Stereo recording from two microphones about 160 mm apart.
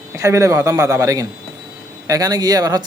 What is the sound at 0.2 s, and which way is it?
Speech, 20° right (ahead or behind).